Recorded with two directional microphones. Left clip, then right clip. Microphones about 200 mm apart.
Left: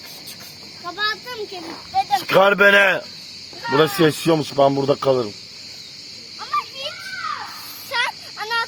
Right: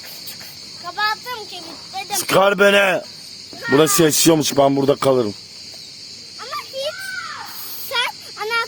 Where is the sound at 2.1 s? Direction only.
25° right (ahead or behind).